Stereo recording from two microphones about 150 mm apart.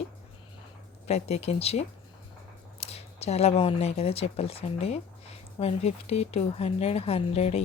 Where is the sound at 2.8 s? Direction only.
45° left (ahead or behind).